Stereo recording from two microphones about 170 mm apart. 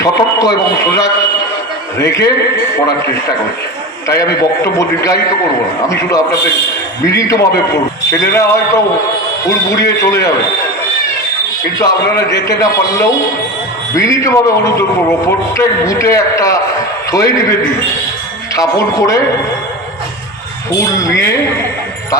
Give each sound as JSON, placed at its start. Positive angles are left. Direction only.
{"t": 0.0, "sound": "a man's voice", "side_deg": 20}
{"t": 4.1, "sound": "a man's voice", "side_deg": 20}
{"t": 11.8, "sound": "a man's voice", "side_deg": 20}
{"t": 18.5, "sound": "a man's voice", "side_deg": 20}
{"t": 20.9, "sound": "a man's voice", "side_deg": 20}